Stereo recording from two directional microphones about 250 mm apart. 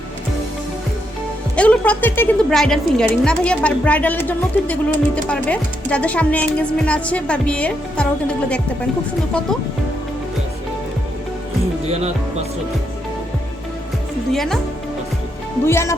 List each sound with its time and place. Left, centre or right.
1.5 s a woman's voice: centre
11.9 s music: right
14.3 s a woman's voice: centre
15.6 s speech: centre